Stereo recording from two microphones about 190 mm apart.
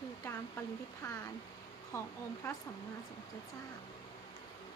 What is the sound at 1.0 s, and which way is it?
A woman's voice, 20° left (ahead or behind).